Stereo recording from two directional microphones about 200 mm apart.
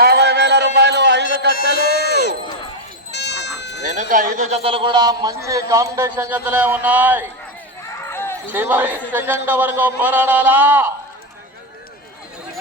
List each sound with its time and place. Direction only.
0.0 s music: 55° right (ahead or behind)
1.8 s a sound: 55° left (ahead or behind)
3.1 s goat: 60° left (ahead or behind)
4.1 s a man's voice: 45° right (ahead or behind); by 7.3 s 10° right (ahead or behind)
8.1 s a sound: 10° left (ahead or behind)
8.5 s a man's voice: 10° right (ahead or behind)